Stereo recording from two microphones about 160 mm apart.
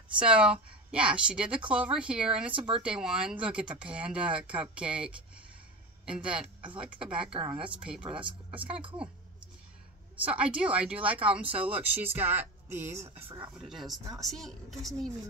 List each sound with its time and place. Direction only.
0.2 s speech: 5° right (ahead or behind)
2.5 s speech: 30° right (ahead or behind)
2.8 s a woman's voice: 5° right (ahead or behind)
10.2 s speech: 5° right (ahead or behind)
13.6 s a woman's voice: centre (ahead or behind)